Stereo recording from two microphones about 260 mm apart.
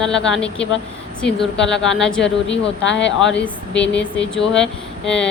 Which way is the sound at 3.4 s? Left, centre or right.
Centre.